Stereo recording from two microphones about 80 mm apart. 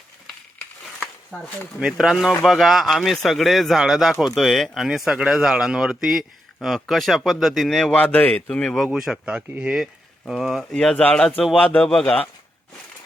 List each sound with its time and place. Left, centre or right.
1.3 s a man's voice: centre
1.8 s speech: centre
7.9 s speech: left
8.8 s speech: centre
10.7 s a man's voice: centre